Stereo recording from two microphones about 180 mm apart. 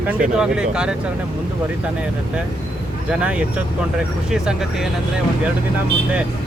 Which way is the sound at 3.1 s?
5° right (ahead or behind).